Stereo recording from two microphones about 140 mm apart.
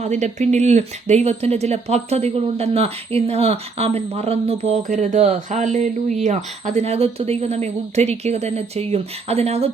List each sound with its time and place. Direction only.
0.0 s speech: 55° right (ahead or behind)
4.8 s speech: 65° right (ahead or behind); by 9.6 s 50° right (ahead or behind)